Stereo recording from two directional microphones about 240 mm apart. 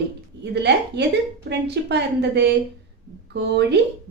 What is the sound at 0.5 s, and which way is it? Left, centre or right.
A woman's voice, right.